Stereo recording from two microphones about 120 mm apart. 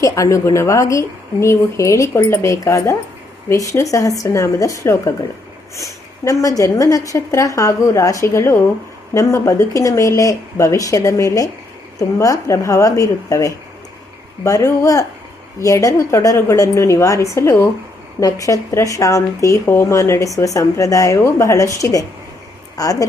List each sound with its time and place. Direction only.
0.0 s speech: 25° left (ahead or behind)